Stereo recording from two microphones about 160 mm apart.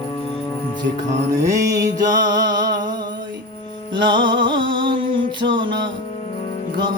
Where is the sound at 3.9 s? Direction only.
30° right (ahead or behind).